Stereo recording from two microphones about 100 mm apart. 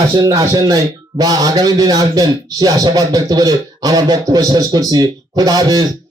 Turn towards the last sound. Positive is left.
turn(degrees=-40)  # may be behind; listen again after turning